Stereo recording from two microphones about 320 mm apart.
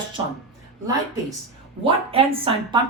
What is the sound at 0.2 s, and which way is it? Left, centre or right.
Speech, centre.